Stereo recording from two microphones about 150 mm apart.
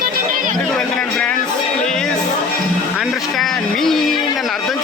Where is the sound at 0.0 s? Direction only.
70° right (ahead or behind).